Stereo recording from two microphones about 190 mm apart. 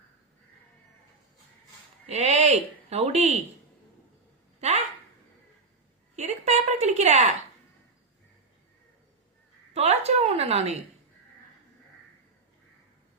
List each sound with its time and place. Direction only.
2.0 s speech: 35° right (ahead or behind)
6.1 s a sound: 35° right (ahead or behind)
9.7 s speech: 35° right (ahead or behind)